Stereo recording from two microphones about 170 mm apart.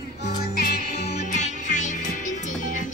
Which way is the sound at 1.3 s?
45° left (ahead or behind).